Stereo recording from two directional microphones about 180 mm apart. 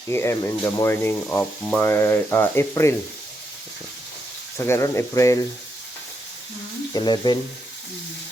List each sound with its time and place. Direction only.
0.1 s speech: 15° left (ahead or behind)
4.5 s speech: 15° left (ahead or behind)
6.9 s frying: 25° left (ahead or behind)